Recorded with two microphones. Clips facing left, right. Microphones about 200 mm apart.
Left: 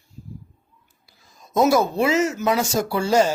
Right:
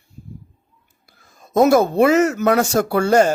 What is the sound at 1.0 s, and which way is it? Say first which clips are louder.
Speech: right 2 dB; 55° right (ahead or behind).